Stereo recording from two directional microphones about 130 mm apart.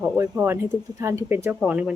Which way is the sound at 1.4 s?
10° right (ahead or behind).